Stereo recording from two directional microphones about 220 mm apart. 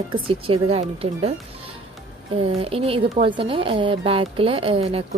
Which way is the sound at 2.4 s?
25° right (ahead or behind).